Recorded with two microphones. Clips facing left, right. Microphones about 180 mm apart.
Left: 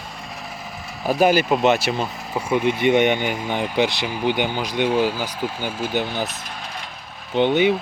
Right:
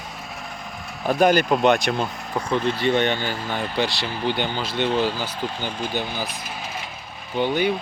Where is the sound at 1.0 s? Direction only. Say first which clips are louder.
Left 1 dB; 5° left (ahead or behind).